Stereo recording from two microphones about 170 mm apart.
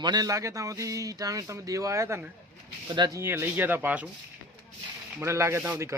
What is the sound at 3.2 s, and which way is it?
Speech, 15° right (ahead or behind).